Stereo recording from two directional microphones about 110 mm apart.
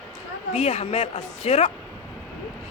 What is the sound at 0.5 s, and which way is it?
Speech, 85° left.